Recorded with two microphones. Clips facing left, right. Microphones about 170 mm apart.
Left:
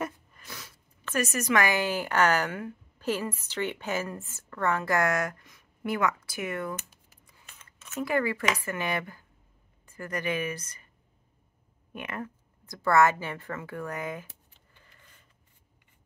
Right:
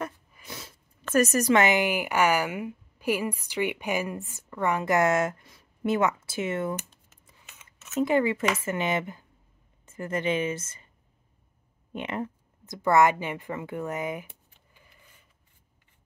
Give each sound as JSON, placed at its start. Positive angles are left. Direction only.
{"t": 0.5, "sound": "a sound", "side_deg": -25}
{"t": 1.0, "sound": "a woman's voice", "side_deg": -45}
{"t": 1.5, "sound": "a woman's voice", "side_deg": -20}
{"t": 7.9, "sound": "a woman's voice", "side_deg": -20}
{"t": 11.9, "sound": "a woman's voice", "side_deg": -25}